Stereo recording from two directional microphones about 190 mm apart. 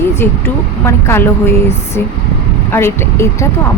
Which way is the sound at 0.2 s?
15° left (ahead or behind).